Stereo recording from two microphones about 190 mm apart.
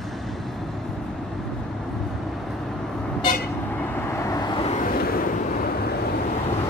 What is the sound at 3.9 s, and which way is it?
Vehicle, 15° left (ahead or behind).